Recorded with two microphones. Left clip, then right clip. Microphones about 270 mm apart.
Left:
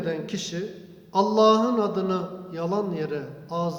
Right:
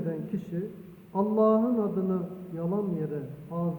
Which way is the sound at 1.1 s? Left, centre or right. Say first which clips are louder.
Left 6 dB; centre.